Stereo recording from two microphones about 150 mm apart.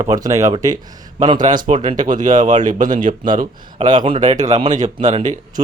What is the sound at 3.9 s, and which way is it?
Speech, 35° right (ahead or behind).